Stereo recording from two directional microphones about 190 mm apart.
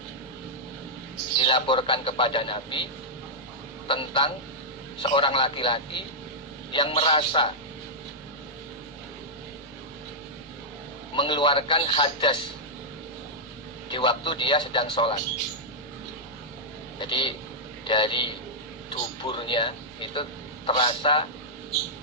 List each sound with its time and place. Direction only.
1.4 s a man's voice: 25° left (ahead or behind)
3.8 s a man's voice: 25° left (ahead or behind)
11.1 s a man's voice: 25° left (ahead or behind)
13.9 s a man's voice: 25° left (ahead or behind)
17.0 s a man's voice: 25° left (ahead or behind)